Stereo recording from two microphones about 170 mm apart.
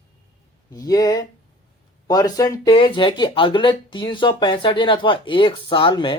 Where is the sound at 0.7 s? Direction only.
20° left (ahead or behind).